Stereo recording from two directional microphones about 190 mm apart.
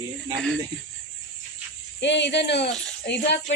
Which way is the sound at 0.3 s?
5° left (ahead or behind).